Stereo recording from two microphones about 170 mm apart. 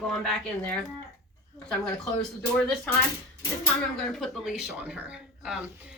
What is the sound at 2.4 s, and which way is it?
Speech, 5° left (ahead or behind).